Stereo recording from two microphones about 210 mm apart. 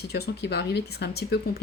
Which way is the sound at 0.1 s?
50° left (ahead or behind).